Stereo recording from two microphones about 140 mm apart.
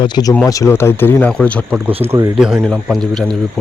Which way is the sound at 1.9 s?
45° right (ahead or behind).